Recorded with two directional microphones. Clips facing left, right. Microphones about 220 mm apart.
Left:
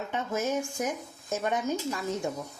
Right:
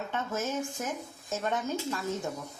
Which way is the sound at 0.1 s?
15° left (ahead or behind).